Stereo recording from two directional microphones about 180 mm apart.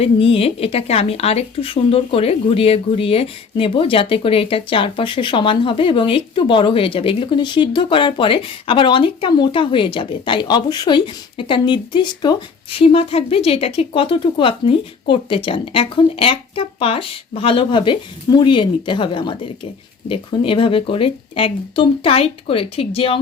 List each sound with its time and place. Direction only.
0.0 s speech: 30° left (ahead or behind)